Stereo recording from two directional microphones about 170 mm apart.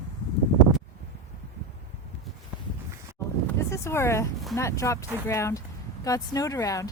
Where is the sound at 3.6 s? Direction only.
15° left (ahead or behind).